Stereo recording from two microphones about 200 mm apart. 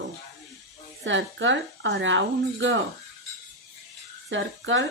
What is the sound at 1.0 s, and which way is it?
Speech, 70° right (ahead or behind).